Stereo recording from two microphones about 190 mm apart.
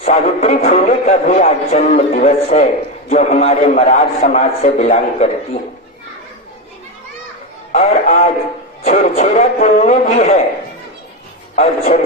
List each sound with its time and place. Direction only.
0.0 s a man's voice: 40° left (ahead or behind)
7.7 s a man's voice: 35° left (ahead or behind)
11.5 s a man's voice: 35° left (ahead or behind)